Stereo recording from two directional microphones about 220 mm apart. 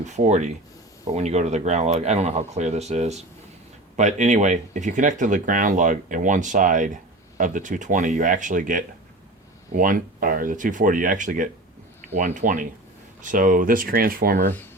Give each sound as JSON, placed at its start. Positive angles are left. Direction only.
{"t": 0.0, "sound": "speech", "side_deg": -30}